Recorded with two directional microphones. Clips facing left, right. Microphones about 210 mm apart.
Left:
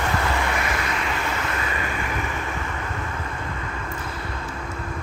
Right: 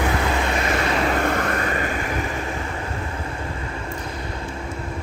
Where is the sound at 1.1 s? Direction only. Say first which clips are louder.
Right 6 dB; 55° right (ahead or behind); by 2.6 s 35° right (ahead or behind).